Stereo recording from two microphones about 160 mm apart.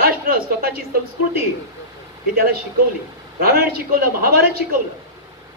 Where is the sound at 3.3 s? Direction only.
70° right (ahead or behind).